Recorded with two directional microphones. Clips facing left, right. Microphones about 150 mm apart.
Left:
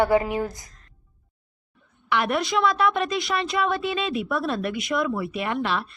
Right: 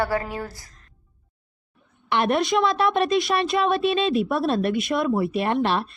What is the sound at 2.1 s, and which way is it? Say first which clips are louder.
A woman's voice: right 3 dB; 30° right (ahead or behind).